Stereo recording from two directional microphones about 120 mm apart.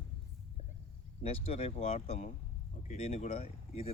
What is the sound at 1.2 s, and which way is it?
Speech, 55° left (ahead or behind).